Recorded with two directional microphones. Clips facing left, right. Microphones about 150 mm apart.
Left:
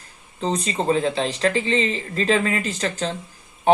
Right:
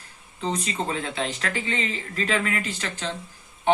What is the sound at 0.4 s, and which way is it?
A woman's voice, 35° left (ahead or behind).